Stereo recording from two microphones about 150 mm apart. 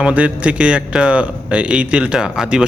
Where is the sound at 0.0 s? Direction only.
10° right (ahead or behind).